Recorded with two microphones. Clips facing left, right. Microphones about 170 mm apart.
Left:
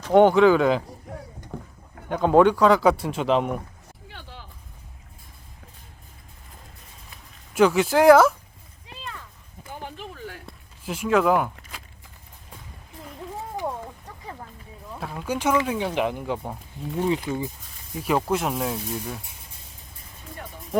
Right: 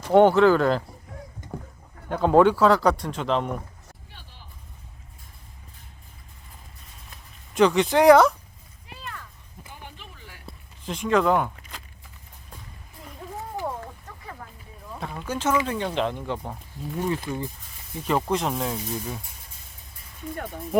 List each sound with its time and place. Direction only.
0.1 s speech: centre (ahead or behind)
2.0 s speech: centre (ahead or behind)
4.1 s vehicle: 85° left
7.5 s speech: 5° left (ahead or behind)
8.9 s a sound: 20° left (ahead or behind)
10.4 s a sound: 5° left (ahead or behind)
14.9 s speech: centre (ahead or behind)